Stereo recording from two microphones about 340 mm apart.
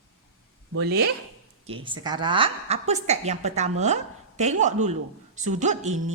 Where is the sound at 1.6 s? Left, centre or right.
Centre.